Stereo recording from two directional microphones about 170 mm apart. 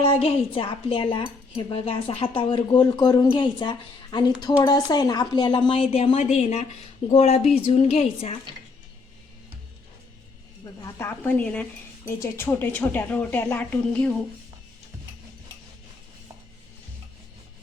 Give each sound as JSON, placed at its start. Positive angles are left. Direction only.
{"t": 0.0, "sound": "a woman's voice", "side_deg": 35}
{"t": 10.8, "sound": "speech", "side_deg": 15}